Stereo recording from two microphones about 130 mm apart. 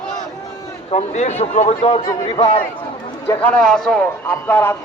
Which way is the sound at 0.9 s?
60° left (ahead or behind).